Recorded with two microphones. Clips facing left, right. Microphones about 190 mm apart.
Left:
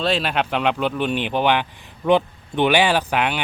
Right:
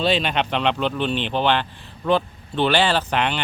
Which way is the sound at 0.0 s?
Centre (ahead or behind).